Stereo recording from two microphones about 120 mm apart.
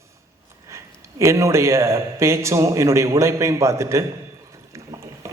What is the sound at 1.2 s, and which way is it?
A man's voice, 25° right (ahead or behind).